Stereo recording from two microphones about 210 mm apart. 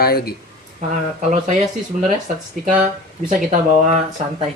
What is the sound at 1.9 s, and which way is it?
Speech, 35° right (ahead or behind).